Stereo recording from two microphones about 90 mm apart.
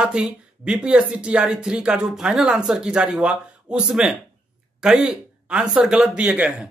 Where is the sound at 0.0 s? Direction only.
10° right (ahead or behind).